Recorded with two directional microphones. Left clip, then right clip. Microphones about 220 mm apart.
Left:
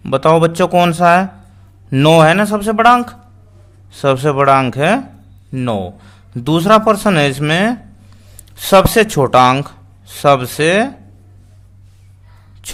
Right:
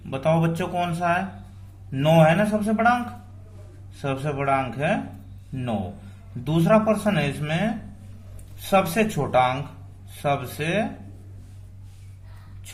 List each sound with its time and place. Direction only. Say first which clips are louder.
0.1 s speech: left 12 dB; 50° left (ahead or behind)
4.0 s speech: left 14 dB; 45° left (ahead or behind)
6.4 s speech: left 10 dB; 50° left (ahead or behind)
8.7 s speech: left 12 dB; 45° left (ahead or behind)